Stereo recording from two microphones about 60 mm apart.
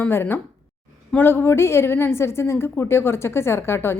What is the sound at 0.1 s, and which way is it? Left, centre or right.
A woman's voice, left.